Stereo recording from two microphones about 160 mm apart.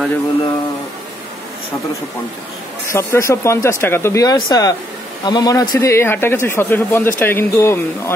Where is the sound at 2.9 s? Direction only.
20° left (ahead or behind).